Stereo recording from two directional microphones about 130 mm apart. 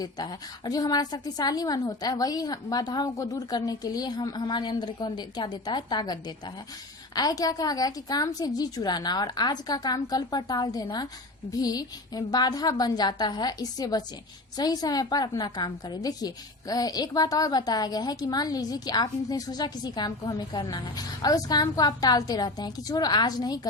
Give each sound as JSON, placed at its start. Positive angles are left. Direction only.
{"t": 0.0, "sound": "a woman's voice", "side_deg": 30}